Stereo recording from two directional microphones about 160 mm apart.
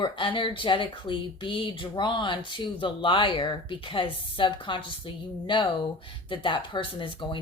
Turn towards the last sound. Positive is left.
turn(degrees=30)  # may be behind; listen again after turning